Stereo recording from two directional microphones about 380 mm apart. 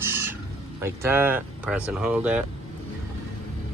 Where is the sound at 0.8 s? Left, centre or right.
Centre.